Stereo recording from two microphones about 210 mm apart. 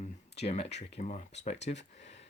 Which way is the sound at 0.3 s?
30° left (ahead or behind).